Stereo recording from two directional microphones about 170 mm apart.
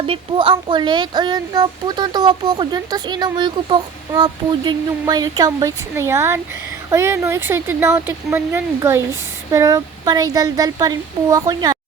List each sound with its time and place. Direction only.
0.1 s speech: 30° right (ahead or behind)